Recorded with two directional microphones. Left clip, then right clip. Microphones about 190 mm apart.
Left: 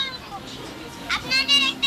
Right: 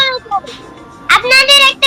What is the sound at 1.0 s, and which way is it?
Speech, 55° right (ahead or behind).